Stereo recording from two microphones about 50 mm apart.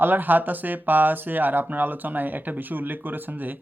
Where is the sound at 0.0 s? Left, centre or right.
Right.